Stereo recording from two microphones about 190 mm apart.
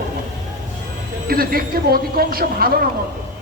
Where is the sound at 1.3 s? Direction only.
50° right (ahead or behind).